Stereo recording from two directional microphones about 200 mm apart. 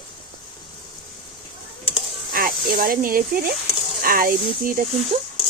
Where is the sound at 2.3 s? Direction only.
45° right (ahead or behind).